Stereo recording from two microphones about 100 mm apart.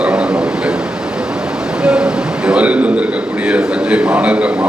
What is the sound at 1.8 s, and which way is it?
A man's voice, 10° right (ahead or behind).